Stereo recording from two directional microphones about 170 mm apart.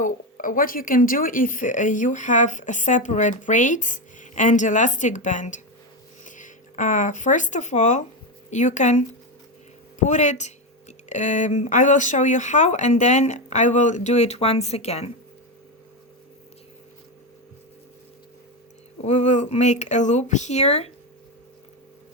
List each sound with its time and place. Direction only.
0.0 s speech: 50° left (ahead or behind)
19.0 s speech: 45° left (ahead or behind)